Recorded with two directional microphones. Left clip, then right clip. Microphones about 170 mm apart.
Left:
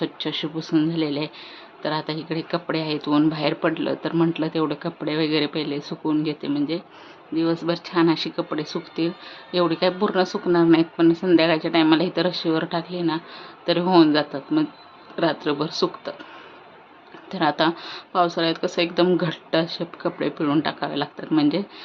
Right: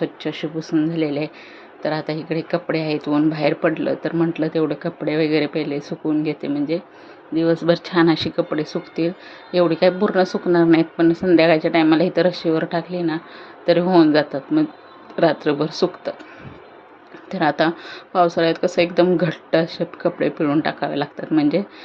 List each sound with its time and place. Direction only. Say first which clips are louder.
0.0 s speech: right 2 dB; 10° right (ahead or behind)
17.2 s speech: right 2 dB; 15° right (ahead or behind)